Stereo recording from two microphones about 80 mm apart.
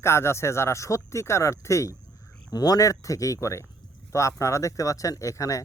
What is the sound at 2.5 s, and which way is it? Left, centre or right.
Speech, left.